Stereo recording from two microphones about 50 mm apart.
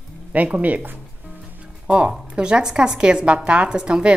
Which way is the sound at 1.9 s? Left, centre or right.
Right.